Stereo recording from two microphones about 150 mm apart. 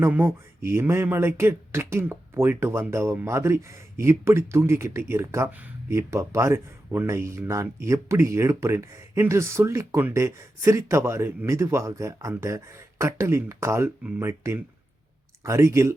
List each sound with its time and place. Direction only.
0.0 s speech: 15° right (ahead or behind)